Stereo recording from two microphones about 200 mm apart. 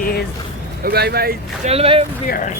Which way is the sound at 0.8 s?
55° right (ahead or behind).